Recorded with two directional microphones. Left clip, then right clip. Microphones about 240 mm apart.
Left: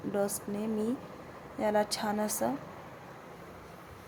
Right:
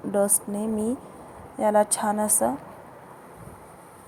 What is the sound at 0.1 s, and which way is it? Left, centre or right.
A woman's voice, centre.